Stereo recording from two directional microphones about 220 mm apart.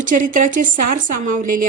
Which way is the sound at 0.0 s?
35° right (ahead or behind).